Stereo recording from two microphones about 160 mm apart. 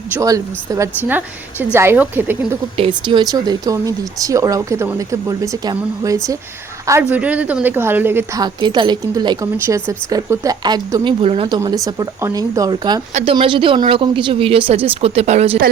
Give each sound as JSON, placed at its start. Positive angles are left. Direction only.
{"t": 0.1, "sound": "a woman's voice", "side_deg": -20}
{"t": 2.7, "sound": "a woman's voice", "side_deg": -35}